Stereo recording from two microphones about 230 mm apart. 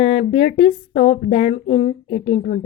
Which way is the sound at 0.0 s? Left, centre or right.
Left.